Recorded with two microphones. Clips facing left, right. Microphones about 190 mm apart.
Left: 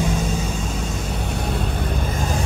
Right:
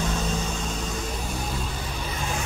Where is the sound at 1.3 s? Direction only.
65° left (ahead or behind); by 2.4 s 45° left (ahead or behind).